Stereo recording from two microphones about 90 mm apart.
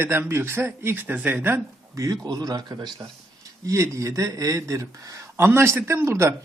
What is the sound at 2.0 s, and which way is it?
Speech, 40° right (ahead or behind).